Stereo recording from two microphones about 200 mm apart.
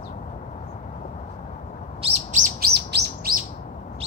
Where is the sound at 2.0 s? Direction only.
35° right (ahead or behind); by 3.3 s 50° right (ahead or behind).